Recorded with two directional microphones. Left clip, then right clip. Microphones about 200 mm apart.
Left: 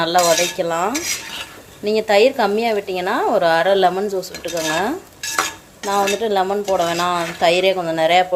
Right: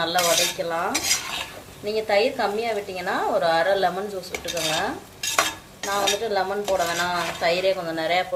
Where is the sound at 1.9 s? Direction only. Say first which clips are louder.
Left 7 dB; 50° left (ahead or behind).